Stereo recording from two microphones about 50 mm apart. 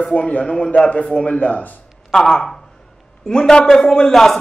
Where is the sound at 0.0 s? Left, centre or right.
Left.